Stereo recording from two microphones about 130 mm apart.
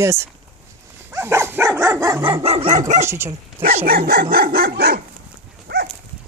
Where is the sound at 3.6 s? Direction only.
20° right (ahead or behind).